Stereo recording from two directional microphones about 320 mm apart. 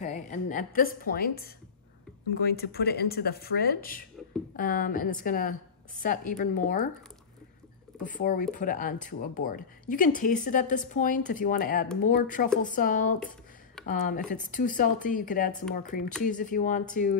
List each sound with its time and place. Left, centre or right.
0.0 s a woman's voice: left
8.0 s speech: left